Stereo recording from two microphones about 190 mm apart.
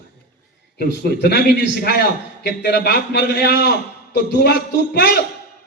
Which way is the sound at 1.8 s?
55° left (ahead or behind).